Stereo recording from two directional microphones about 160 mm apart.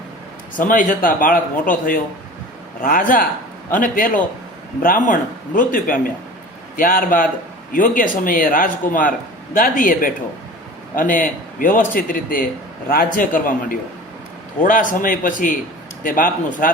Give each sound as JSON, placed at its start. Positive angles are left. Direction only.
{"t": 0.6, "sound": "a man's voice", "side_deg": 60}
{"t": 2.8, "sound": "a man's voice", "side_deg": 55}